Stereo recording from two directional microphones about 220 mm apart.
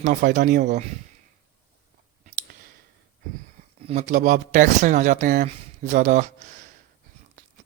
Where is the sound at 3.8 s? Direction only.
30° right (ahead or behind).